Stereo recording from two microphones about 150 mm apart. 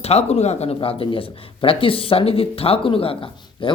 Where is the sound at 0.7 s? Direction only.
35° left (ahead or behind).